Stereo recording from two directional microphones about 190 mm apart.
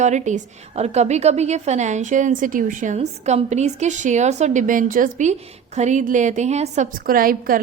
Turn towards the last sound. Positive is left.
turn(degrees=-50)  # may be behind; listen again after turning